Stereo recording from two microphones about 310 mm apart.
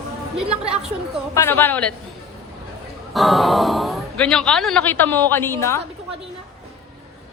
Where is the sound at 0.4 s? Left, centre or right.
Centre.